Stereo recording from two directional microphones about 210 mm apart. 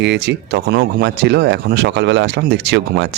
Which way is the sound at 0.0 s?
55° right (ahead or behind).